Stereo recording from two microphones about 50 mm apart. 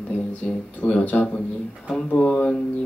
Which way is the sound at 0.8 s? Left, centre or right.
Left.